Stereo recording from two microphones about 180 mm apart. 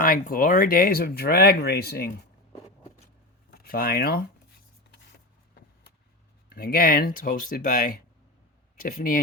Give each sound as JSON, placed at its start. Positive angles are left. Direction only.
{"t": 0.0, "sound": "speech", "side_deg": 50}
{"t": 3.5, "sound": "speech", "side_deg": 55}
{"t": 6.5, "sound": "speech", "side_deg": 55}